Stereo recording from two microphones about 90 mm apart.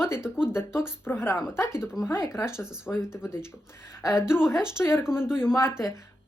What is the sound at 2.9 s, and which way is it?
Speech, 30° left (ahead or behind).